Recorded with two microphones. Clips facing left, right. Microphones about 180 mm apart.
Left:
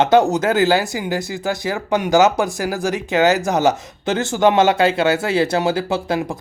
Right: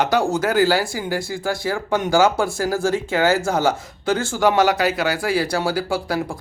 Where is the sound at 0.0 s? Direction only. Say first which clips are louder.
Left 5 dB; 25° left (ahead or behind).